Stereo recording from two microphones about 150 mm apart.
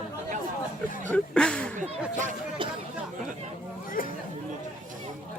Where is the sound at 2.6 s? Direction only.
35° right (ahead or behind).